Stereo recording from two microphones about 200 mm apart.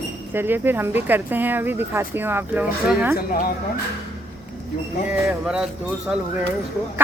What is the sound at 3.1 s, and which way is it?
Speech, 45° left (ahead or behind).